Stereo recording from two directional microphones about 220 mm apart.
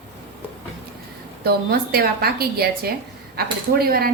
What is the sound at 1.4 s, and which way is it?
A woman's voice, 45° right (ahead or behind).